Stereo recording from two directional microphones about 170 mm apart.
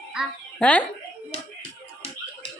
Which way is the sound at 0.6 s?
10° left (ahead or behind).